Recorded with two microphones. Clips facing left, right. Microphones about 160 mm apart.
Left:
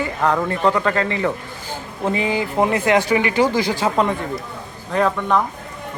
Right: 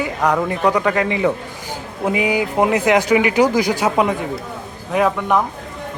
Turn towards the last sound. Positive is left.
turn(degrees=-15)  # may be behind; listen again after turning